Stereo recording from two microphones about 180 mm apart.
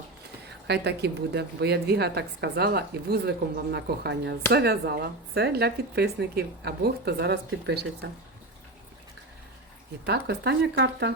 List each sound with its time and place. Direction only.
0.7 s a woman's voice: 70° right (ahead or behind)
10.1 s speech: 65° right (ahead or behind)